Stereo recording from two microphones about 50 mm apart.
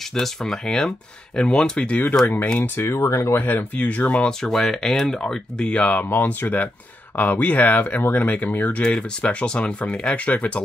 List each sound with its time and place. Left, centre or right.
0.1 s speech: centre
2.2 s speech: left
2.6 s speech: left
2.9 s speech: left
3.3 s speech: left
3.7 s speech: left
4.3 s speech: centre; by 10.6 s left